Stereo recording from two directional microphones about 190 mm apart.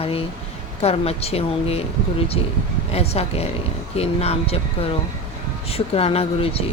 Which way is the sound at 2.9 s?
35° left (ahead or behind).